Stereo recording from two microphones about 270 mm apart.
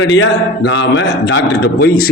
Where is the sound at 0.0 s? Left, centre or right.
Left.